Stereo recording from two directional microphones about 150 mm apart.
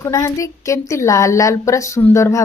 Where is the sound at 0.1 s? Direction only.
20° left (ahead or behind).